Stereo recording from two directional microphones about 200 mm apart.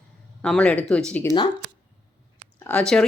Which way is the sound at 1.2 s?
20° left (ahead or behind).